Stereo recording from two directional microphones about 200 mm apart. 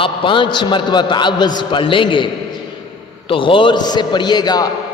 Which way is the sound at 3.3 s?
25° left (ahead or behind).